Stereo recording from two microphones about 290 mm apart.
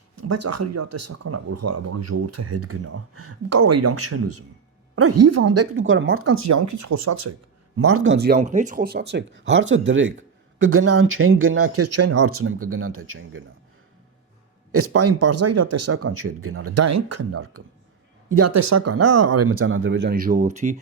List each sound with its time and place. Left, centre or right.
0.2 s speech: right
7.9 s speech: right
14.7 s speech: right